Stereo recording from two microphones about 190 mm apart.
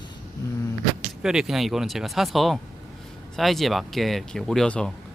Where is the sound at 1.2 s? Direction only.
5° right (ahead or behind).